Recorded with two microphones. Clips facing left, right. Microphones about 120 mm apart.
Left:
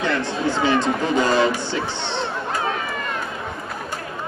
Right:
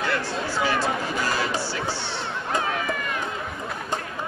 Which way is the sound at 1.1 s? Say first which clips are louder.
Left 8 dB; 20° left (ahead or behind).